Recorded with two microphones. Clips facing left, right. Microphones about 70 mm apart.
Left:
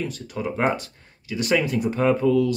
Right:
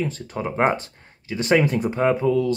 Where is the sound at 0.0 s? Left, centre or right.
Right.